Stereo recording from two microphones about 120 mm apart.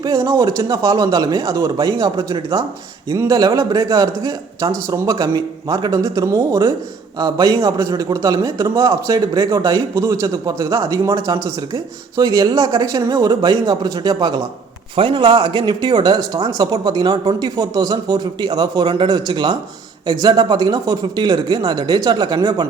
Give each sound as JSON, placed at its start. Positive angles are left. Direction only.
{"t": 0.0, "sound": "a man's voice", "side_deg": -30}